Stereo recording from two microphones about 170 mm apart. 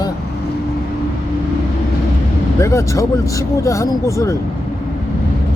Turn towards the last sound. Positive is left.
turn(degrees=20)  # may be behind; listen again after turning